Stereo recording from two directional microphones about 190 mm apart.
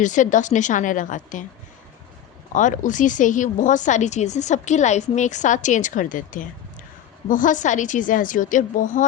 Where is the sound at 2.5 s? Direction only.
40° left (ahead or behind).